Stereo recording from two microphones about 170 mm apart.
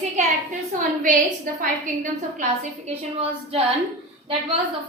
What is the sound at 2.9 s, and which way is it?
Speech, 35° right (ahead or behind).